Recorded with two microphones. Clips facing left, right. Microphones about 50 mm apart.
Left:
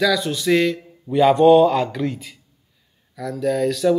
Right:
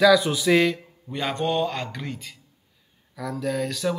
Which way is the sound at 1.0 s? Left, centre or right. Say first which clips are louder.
Left 13 dB; centre.